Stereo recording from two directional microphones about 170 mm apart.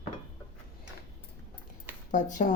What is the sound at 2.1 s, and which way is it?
Speech, 50° left (ahead or behind).